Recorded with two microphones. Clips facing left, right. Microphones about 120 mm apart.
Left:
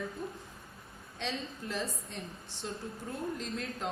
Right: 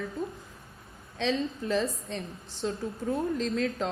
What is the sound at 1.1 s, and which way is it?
Speech, 90° right.